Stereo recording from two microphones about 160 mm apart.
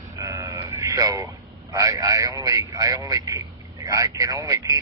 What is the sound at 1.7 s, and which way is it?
A man's voice, 20° right (ahead or behind).